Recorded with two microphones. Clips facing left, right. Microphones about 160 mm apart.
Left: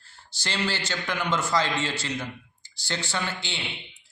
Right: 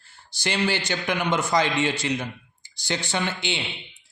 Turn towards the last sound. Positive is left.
turn(degrees=-20)  # may be behind; listen again after turning